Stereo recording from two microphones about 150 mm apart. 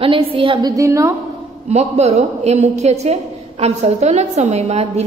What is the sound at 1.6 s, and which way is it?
A woman's voice, 45° right (ahead or behind).